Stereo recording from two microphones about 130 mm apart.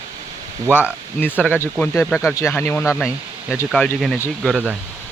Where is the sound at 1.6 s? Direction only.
20° left (ahead or behind).